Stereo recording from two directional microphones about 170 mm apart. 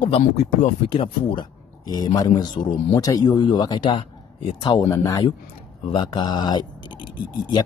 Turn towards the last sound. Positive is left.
turn(degrees=25)  # may be behind; listen again after turning